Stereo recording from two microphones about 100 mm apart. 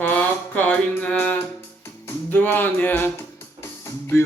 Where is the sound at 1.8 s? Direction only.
25° left (ahead or behind).